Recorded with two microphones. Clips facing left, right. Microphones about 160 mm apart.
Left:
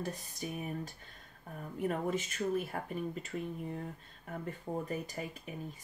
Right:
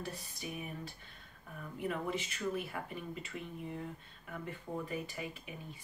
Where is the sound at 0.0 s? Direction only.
45° left (ahead or behind).